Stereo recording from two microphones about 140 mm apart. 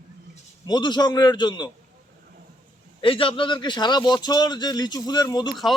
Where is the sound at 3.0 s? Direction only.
40° left (ahead or behind).